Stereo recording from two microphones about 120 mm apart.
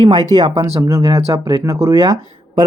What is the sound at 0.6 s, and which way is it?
Speech, 25° right (ahead or behind).